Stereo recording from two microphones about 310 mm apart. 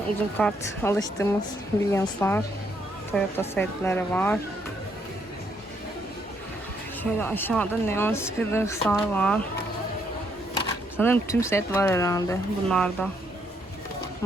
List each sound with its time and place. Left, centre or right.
0.3 s speech: centre
7.0 s speech: centre
10.9 s speech: centre